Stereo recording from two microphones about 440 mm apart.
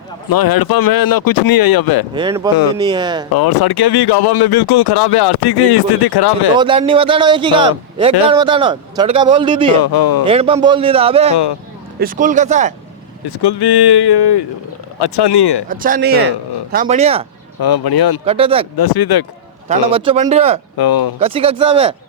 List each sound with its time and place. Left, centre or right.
0.3 s speech: left
2.1 s a man's voice: centre
3.3 s speech: left
6.6 s a man's voice: centre
9.8 s speech: left
10.2 s a man's voice: centre
13.2 s speech: left
15.7 s a man's voice: centre
17.6 s speech: left
18.3 s a man's voice: centre
18.8 s speech: left
19.6 s a man's voice: centre
20.7 s speech: left
21.2 s a man's voice: centre